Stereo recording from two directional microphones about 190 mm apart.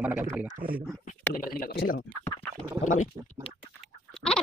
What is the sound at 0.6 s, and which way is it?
Speech, 45° right (ahead or behind).